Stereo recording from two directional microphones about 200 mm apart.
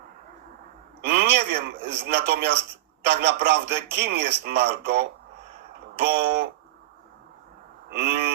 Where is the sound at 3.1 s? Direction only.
55° right (ahead or behind).